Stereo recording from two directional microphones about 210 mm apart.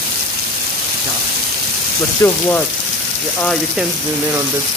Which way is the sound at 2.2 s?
15° left (ahead or behind).